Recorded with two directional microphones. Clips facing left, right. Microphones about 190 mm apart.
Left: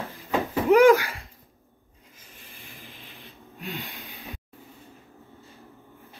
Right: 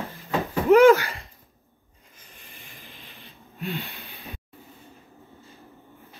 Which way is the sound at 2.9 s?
Centre (ahead or behind).